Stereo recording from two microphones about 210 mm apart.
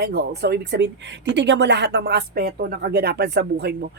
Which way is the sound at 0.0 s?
50° right (ahead or behind).